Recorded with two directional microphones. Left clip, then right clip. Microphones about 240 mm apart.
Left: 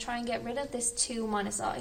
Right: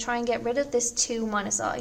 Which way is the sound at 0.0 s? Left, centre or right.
Right.